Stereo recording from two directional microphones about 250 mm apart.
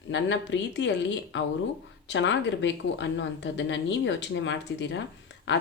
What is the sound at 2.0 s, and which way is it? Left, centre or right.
Speech, left.